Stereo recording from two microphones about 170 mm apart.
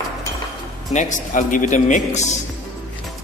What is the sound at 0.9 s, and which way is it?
Speech, 45° left (ahead or behind).